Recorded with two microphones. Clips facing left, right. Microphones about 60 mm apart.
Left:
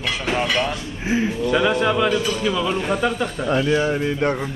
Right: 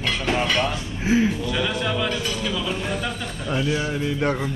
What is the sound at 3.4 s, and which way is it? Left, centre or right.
Speech, left.